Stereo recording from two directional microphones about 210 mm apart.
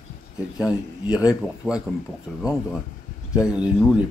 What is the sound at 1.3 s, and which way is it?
Speech, 5° right (ahead or behind).